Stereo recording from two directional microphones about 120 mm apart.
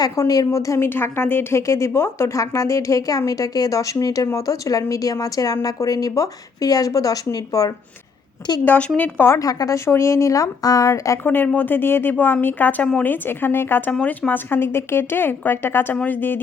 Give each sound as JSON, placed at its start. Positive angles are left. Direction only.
{"t": 0.0, "sound": "a woman's voice", "side_deg": 30}
{"t": 8.6, "sound": "a woman's voice", "side_deg": 15}
{"t": 11.3, "sound": "speech", "side_deg": 15}